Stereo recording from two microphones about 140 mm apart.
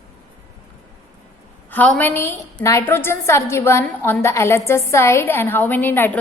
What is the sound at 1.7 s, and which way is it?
A woman's voice, 10° left (ahead or behind).